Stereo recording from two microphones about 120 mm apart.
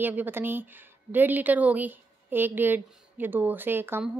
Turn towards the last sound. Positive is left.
turn(degrees=-20)  # may be behind; listen again after turning